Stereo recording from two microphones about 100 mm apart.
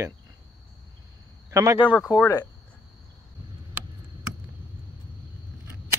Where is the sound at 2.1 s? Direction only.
35° left (ahead or behind).